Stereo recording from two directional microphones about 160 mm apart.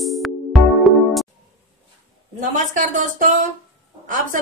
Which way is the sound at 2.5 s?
55° right (ahead or behind).